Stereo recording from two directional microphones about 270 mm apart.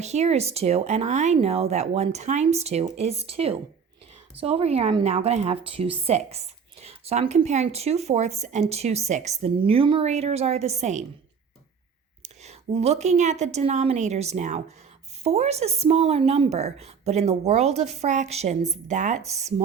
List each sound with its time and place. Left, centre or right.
0.0 s a woman's voice: right
12.2 s a woman's voice: right